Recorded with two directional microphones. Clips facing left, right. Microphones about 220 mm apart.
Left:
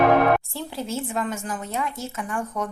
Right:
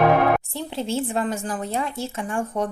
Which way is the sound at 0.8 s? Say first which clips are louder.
Right 4 dB; 30° right (ahead or behind).